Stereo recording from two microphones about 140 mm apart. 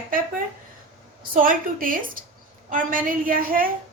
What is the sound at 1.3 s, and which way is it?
A woman's voice, 85° right.